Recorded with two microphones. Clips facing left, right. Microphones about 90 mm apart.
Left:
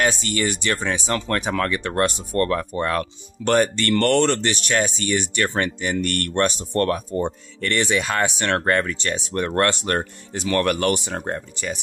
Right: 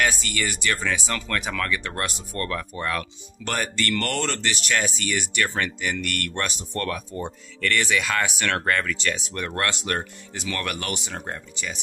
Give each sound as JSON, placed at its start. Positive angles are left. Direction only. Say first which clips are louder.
{"t": 0.0, "sound": "speech", "louder": "left 3 dB", "side_deg": 30}